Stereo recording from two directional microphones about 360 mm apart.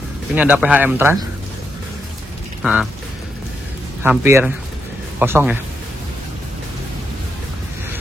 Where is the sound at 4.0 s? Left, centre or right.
Centre.